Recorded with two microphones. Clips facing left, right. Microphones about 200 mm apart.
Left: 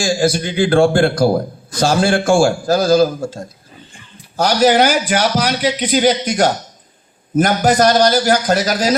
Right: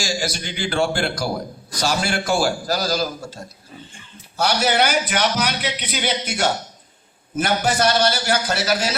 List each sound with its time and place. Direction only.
0.0 s a man's voice: 55° left (ahead or behind)
4.4 s a man's voice: 35° left (ahead or behind)